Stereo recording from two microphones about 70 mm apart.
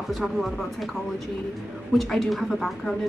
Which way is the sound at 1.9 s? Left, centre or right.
Centre.